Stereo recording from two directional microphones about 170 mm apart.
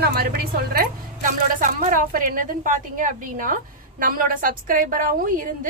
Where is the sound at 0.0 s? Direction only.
65° right (ahead or behind).